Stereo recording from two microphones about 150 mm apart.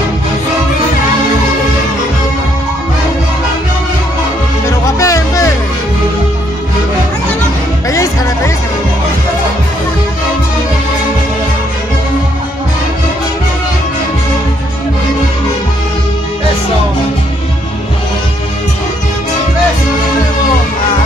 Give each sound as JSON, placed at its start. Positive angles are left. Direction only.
{"t": 4.6, "sound": "music", "side_deg": 20}